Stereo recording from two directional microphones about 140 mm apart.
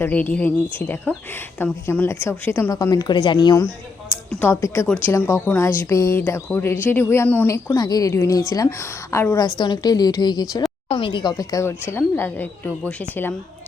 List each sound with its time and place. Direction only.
0.0 s speech: 10° left (ahead or behind); by 3.5 s 35° left (ahead or behind)
4.3 s speech: 15° left (ahead or behind)
11.7 s speech: 15° left (ahead or behind)